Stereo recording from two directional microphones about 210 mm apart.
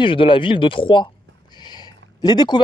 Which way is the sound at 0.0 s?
25° left (ahead or behind).